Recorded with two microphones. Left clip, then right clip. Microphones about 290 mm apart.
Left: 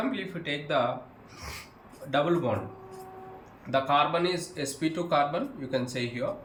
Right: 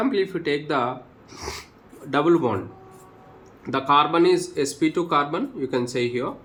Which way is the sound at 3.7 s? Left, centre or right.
Centre.